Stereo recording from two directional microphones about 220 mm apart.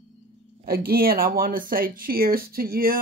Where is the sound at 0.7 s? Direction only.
45° right (ahead or behind).